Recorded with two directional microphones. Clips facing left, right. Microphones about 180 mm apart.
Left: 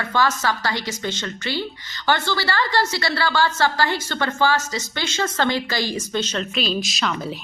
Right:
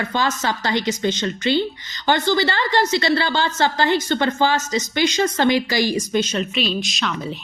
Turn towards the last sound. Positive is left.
turn(degrees=0)  # may be behind; listen again after turning